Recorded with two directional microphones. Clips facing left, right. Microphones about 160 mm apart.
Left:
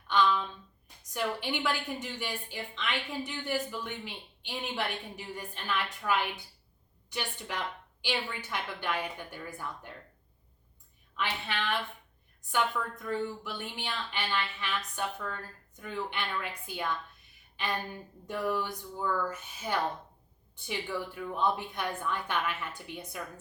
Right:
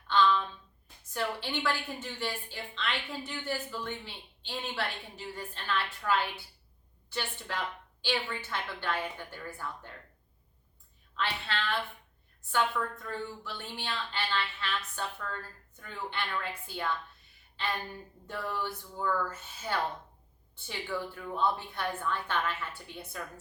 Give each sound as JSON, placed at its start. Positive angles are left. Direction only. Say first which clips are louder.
{"t": 0.1, "sound": "a sound", "louder": "right 1 dB", "side_deg": 15}
{"t": 1.0, "sound": "a woman's voice", "louder": "left 1 dB", "side_deg": 15}
{"t": 11.2, "sound": "a woman's voice", "louder": "even", "side_deg": 15}